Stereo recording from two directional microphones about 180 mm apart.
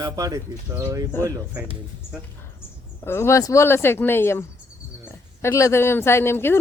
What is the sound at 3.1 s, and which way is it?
Speech, 15° left (ahead or behind).